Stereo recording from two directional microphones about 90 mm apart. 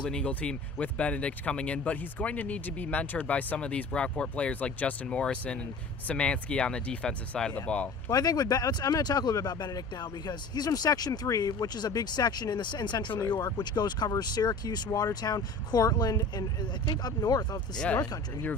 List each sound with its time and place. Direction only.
0.0 s speech: 10° left (ahead or behind)
8.1 s speech: 45° left (ahead or behind)
17.7 s speech: 15° left (ahead or behind)
18.0 s speech: 45° left (ahead or behind)